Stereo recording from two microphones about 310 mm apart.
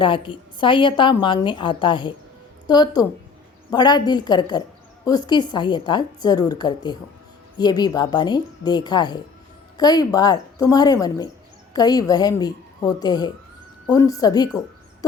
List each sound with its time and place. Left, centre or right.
0.0 s a woman's voice: centre